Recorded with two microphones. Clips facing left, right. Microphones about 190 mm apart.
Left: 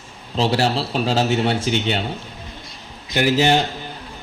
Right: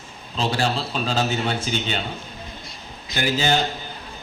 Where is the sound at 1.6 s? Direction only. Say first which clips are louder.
Left 5 dB; 85° left.